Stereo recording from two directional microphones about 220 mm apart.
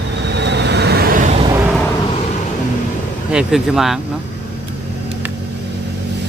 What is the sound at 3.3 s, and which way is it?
Speech, centre (ahead or behind).